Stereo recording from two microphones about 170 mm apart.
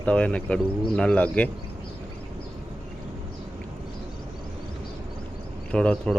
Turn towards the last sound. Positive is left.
turn(degrees=5)  # may be behind; listen again after turning